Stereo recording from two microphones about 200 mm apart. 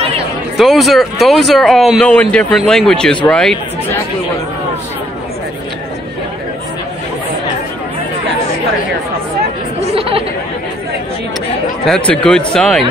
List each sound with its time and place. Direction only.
0.6 s speech: centre (ahead or behind)
9.9 s chatter: 30° right (ahead or behind)
11.9 s speech: 5° left (ahead or behind)